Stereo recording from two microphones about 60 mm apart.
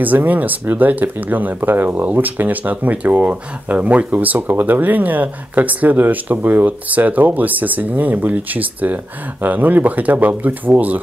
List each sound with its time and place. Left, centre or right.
0.0 s speech: right